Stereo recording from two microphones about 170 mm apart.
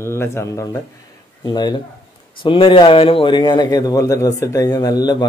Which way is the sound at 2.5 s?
30° left (ahead or behind).